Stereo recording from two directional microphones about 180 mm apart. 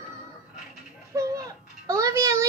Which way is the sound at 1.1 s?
20° right (ahead or behind).